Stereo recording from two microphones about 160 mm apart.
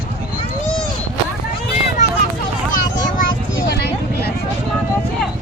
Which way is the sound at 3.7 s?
85° left.